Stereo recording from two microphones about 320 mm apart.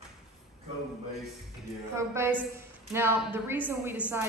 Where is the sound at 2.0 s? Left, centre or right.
Centre.